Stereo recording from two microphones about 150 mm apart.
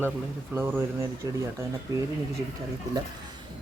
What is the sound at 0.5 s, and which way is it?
Speech, 15° right (ahead or behind).